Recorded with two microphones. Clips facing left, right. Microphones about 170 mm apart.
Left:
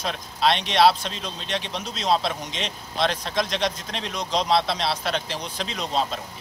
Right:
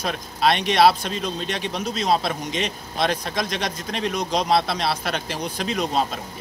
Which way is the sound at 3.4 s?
50° right (ahead or behind).